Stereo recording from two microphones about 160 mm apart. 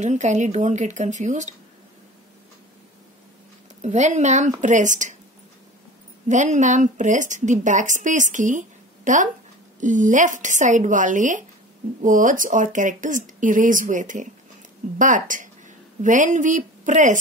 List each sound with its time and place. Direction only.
0.0 s a woman's voice: 45° right (ahead or behind)
3.8 s a woman's voice: 45° right (ahead or behind)
6.2 s a woman's voice: 50° right (ahead or behind)